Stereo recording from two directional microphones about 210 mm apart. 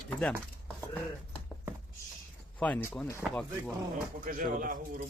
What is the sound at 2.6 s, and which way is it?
Speech, 10° left (ahead or behind).